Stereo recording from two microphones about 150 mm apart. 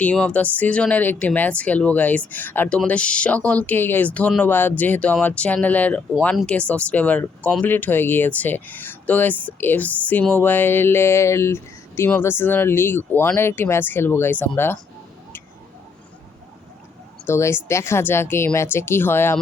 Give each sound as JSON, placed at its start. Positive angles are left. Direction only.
{"t": 0.0, "sound": "speech", "side_deg": 10}
{"t": 17.2, "sound": "speech", "side_deg": 15}